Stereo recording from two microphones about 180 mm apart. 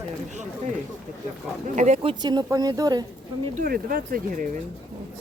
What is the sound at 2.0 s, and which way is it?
Speech, 25° right (ahead or behind).